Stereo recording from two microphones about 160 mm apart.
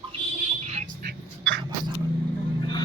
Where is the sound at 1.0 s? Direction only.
90° right.